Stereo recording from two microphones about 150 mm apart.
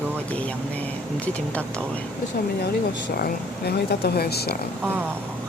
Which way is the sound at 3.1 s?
90° left.